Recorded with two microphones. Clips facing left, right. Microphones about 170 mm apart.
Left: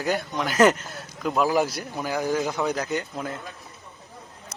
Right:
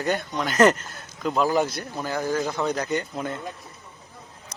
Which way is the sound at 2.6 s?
5° left (ahead or behind).